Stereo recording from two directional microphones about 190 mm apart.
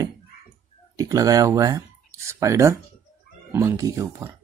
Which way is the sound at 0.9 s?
20° right (ahead or behind).